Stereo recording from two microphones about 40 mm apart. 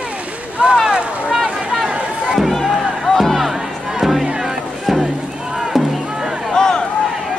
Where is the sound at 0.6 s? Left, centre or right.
Right.